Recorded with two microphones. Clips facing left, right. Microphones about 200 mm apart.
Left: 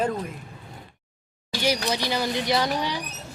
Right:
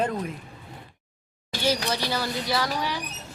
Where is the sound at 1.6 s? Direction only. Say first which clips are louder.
Left 1 dB; 15° left (ahead or behind).